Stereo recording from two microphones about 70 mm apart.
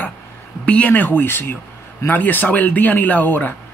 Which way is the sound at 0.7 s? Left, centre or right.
Left.